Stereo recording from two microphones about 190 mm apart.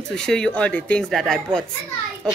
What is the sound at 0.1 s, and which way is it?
A woman's voice, 5° left (ahead or behind).